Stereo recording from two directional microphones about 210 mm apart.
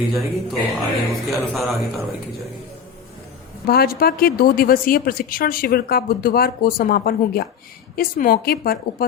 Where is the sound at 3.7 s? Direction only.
45° left (ahead or behind).